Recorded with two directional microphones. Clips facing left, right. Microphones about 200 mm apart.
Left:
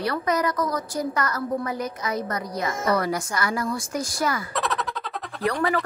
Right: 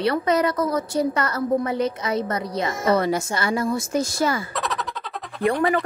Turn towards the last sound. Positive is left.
turn(degrees=-25)  # may be behind; listen again after turning